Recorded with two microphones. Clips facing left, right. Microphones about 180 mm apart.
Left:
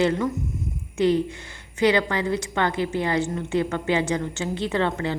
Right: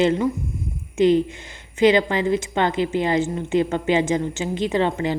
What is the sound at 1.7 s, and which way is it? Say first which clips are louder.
A woman's voice: right 4 dB; 20° right (ahead or behind).